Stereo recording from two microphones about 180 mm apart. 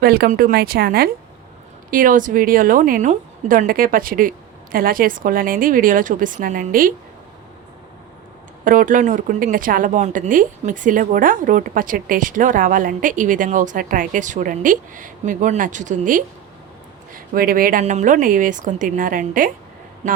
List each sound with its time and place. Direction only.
0.0 s a woman's voice: 60° right (ahead or behind)
8.6 s a woman's voice: 50° right (ahead or behind)